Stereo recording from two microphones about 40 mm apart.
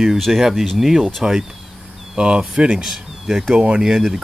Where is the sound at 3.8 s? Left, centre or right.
Centre.